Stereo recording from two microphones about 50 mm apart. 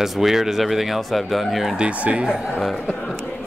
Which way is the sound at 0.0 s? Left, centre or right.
Centre.